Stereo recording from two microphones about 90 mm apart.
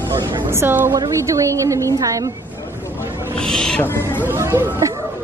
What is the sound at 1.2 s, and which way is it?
A woman's voice, 35° right (ahead or behind).